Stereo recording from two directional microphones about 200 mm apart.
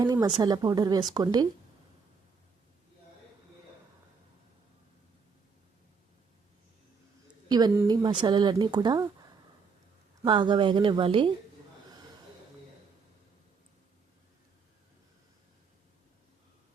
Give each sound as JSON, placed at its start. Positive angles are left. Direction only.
{"t": 0.0, "sound": "speech", "side_deg": -20}
{"t": 7.4, "sound": "speech", "side_deg": -20}
{"t": 10.2, "sound": "speech", "side_deg": -20}